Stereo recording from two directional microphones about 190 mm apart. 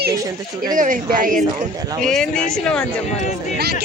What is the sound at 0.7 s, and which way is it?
Speech, 45° right (ahead or behind).